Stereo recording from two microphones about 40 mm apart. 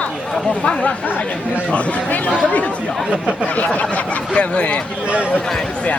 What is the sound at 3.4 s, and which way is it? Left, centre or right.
Speech, left.